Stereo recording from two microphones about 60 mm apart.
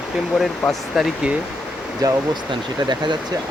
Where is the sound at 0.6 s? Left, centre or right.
Centre.